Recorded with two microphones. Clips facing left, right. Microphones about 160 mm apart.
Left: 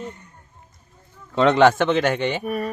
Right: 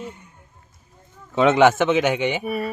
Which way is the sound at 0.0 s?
10° right (ahead or behind).